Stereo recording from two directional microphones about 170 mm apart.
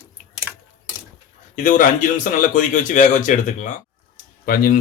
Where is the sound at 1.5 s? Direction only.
50° left (ahead or behind).